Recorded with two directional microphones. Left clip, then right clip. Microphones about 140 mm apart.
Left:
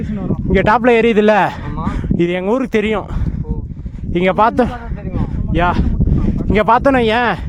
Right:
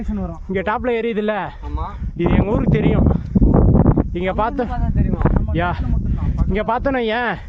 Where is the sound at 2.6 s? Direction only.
55° left (ahead or behind).